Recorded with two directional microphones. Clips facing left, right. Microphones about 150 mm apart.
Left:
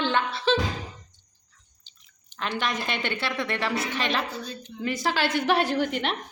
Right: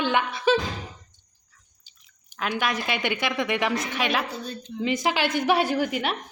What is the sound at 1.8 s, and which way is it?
A woman's voice, 10° right (ahead or behind).